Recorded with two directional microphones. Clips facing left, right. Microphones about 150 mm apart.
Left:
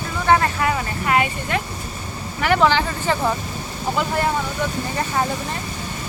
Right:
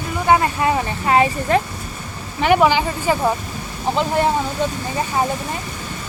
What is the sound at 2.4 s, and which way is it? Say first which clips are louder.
Speech: right 3 dB; 15° right (ahead or behind).